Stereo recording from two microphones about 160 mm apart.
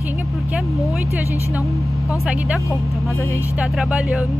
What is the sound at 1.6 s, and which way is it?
Speech, 20° left (ahead or behind).